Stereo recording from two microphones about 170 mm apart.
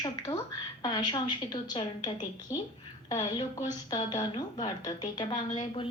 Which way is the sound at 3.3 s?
25° left (ahead or behind).